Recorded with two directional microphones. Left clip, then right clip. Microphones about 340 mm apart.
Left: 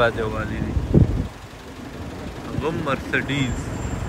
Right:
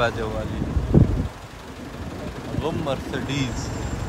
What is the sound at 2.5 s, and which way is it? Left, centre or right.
Speech, centre.